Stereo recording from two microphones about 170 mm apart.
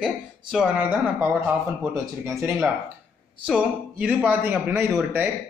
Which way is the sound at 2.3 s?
10° right (ahead or behind).